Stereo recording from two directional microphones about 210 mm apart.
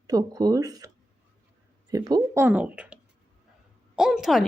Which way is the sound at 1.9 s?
15° right (ahead or behind).